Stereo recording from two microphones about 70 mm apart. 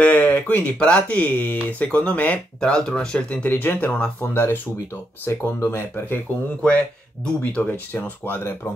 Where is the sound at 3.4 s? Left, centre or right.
Left.